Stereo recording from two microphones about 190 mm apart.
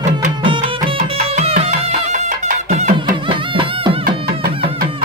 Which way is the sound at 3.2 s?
25° right (ahead or behind).